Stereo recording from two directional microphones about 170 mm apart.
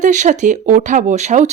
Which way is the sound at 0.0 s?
45° right (ahead or behind).